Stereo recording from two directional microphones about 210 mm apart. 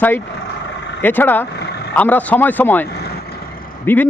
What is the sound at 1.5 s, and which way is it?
Vehicle, 50° left (ahead or behind).